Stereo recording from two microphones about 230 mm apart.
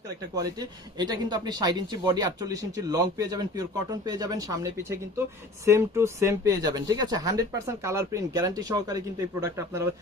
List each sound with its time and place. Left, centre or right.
0.6 s speech: centre